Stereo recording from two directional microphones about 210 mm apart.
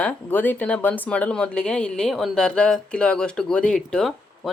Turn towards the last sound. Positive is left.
turn(degrees=0)  # may be behind; listen again after turning